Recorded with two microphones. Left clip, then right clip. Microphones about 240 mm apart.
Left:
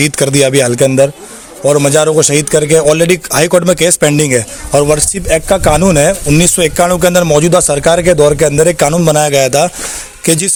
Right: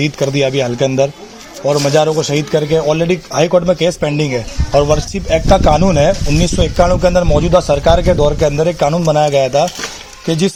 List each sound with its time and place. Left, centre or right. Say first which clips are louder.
0.0 s speech: left 4 dB; left